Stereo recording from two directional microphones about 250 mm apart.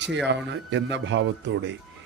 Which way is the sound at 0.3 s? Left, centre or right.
Right.